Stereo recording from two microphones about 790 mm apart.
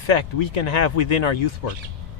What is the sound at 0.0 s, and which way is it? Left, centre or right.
Speech, left.